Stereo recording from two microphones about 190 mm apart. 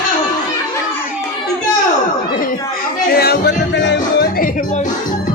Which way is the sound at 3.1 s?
55° left (ahead or behind).